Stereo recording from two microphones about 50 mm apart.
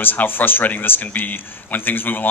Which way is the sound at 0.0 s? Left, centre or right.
Left.